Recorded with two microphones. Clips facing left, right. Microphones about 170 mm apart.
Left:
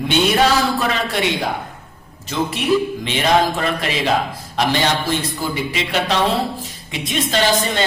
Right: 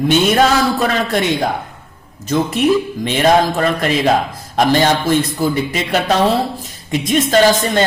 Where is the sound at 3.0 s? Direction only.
45° right (ahead or behind).